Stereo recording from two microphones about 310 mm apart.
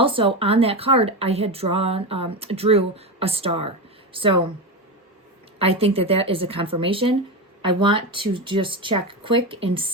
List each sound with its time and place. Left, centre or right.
0.0 s a woman's voice: centre
5.5 s a woman's voice: centre